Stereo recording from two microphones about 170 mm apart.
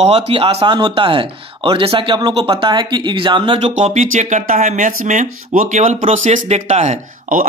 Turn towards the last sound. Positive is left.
turn(degrees=-45)  # may be behind; listen again after turning